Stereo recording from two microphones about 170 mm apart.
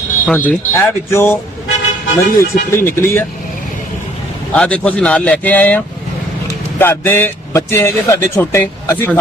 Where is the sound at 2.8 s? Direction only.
15° left (ahead or behind).